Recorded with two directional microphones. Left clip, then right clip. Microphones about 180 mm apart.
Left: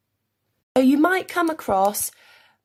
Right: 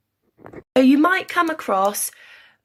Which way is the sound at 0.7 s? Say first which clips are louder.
Right 2 dB; 45° left (ahead or behind).